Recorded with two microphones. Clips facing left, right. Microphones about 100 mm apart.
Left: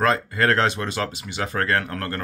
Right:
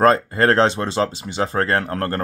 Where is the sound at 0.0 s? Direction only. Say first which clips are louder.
Right 5 dB; 35° right (ahead or behind).